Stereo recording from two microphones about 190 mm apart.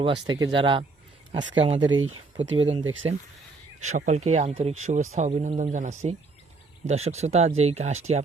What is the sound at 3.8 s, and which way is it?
A man's voice, 40° right (ahead or behind).